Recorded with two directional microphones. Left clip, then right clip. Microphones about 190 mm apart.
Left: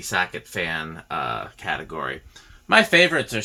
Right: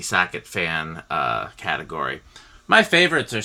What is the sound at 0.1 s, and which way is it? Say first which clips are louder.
Speech: right 3 dB; 35° right (ahead or behind).